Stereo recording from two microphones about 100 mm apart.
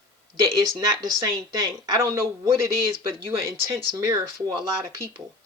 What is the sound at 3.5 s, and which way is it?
Speech, 30° right (ahead or behind).